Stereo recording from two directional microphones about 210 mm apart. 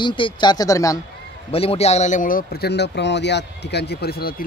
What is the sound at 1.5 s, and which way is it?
Speech, 30° left (ahead or behind).